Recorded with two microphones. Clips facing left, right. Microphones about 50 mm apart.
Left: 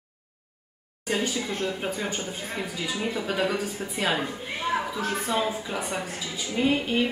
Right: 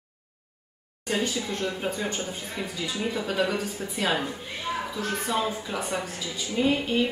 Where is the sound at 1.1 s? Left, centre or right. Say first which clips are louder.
Even; centre.